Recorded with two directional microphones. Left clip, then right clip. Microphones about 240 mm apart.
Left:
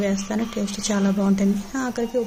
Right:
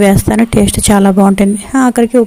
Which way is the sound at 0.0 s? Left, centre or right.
Right.